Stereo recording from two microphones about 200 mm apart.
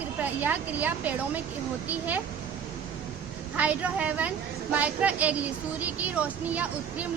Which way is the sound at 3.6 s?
5° right (ahead or behind).